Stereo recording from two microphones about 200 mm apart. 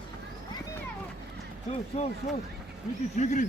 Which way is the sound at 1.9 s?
30° left (ahead or behind).